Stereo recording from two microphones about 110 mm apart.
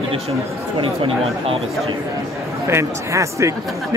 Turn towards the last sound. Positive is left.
turn(degrees=-25)  # may be behind; listen again after turning